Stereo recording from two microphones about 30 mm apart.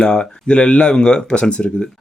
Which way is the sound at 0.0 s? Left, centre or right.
Left.